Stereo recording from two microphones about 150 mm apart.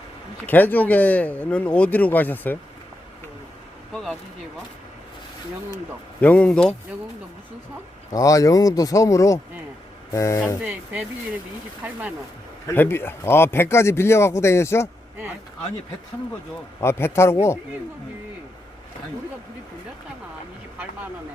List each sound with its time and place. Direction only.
0.4 s speech: 10° left (ahead or behind)
6.1 s speech: 10° left (ahead or behind)
8.1 s speech: 25° left (ahead or behind)
10.6 s speech: 10° right (ahead or behind)
12.6 s speech: 15° left (ahead or behind)
16.8 s speech: 15° left (ahead or behind)